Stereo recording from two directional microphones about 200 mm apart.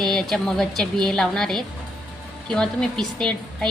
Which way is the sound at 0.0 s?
Centre (ahead or behind).